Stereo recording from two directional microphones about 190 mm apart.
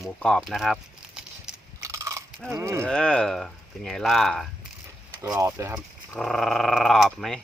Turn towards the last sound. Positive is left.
turn(degrees=0)  # may be behind; listen again after turning